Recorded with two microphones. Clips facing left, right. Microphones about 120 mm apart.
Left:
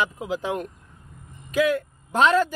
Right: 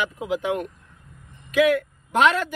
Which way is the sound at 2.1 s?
35° left (ahead or behind).